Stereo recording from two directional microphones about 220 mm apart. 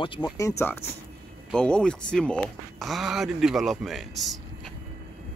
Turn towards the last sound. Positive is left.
turn(degrees=0)  # may be behind; listen again after turning